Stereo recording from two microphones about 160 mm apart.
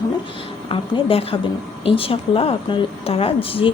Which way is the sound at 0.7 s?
35° left (ahead or behind).